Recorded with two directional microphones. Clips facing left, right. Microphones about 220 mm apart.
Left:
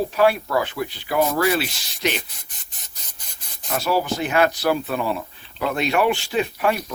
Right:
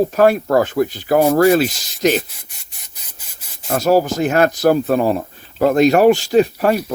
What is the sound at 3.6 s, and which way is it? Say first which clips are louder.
Speech: right 8 dB; 45° right (ahead or behind).